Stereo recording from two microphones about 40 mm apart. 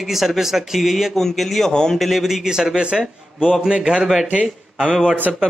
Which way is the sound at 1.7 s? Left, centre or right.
Centre.